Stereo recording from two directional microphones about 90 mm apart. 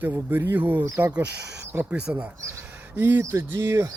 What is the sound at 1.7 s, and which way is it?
Mantra, 20° right (ahead or behind).